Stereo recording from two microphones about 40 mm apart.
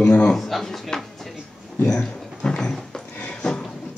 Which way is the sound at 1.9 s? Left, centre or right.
Left.